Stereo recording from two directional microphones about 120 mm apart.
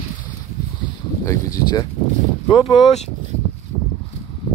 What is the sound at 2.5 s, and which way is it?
Speech, 45° left (ahead or behind).